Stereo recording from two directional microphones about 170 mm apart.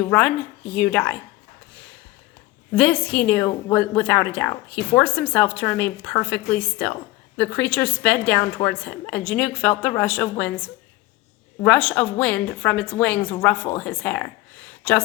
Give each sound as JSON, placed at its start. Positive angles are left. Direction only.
{"t": 0.0, "sound": "a woman's voice", "side_deg": 10}
{"t": 2.7, "sound": "a woman's voice", "side_deg": 10}